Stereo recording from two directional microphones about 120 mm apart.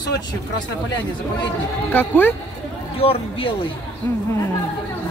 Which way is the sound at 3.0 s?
50° left (ahead or behind).